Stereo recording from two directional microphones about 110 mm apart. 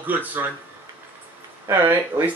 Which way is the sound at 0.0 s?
15° right (ahead or behind).